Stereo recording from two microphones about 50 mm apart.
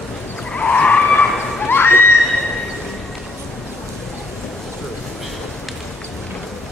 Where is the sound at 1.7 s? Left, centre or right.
Left.